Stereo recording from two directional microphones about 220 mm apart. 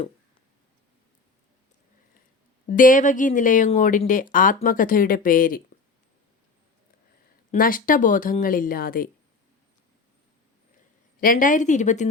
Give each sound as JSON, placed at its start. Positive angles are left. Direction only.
{"t": 2.6, "sound": "speech", "side_deg": 35}
{"t": 7.5, "sound": "speech", "side_deg": 40}
{"t": 11.2, "sound": "speech", "side_deg": 40}